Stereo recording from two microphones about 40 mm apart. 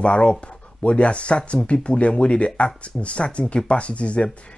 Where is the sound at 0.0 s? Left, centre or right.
Left.